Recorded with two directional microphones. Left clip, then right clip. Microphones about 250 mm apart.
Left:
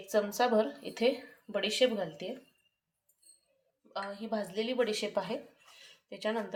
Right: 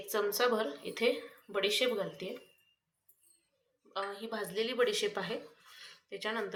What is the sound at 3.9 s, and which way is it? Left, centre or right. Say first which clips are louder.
A woman's voice: left 2 dB; left.